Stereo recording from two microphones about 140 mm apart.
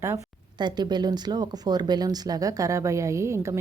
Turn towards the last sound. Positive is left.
turn(degrees=-20)  # may be behind; listen again after turning